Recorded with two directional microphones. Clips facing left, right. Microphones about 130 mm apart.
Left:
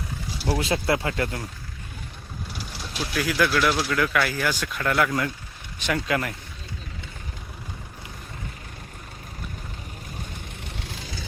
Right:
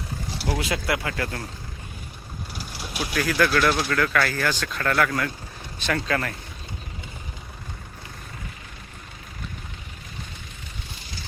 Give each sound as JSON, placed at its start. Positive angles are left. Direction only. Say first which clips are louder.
{"t": 0.6, "sound": "speech", "louder": "left 4 dB", "side_deg": 30}
{"t": 2.5, "sound": "vehicle", "louder": "right 2 dB", "side_deg": -5}
{"t": 3.2, "sound": "speech", "louder": "right 1 dB", "side_deg": 10}